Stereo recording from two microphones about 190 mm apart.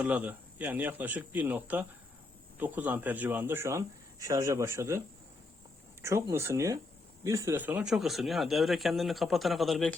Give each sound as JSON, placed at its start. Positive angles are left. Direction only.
{"t": 0.0, "sound": "speech", "side_deg": -10}